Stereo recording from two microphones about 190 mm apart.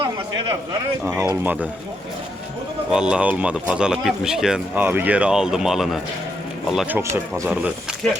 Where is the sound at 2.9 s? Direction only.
5° right (ahead or behind).